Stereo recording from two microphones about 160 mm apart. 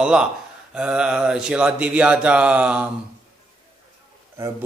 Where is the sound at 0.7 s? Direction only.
5° right (ahead or behind).